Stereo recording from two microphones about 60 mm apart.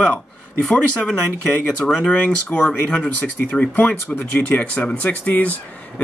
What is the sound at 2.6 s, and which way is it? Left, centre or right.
Speech, centre.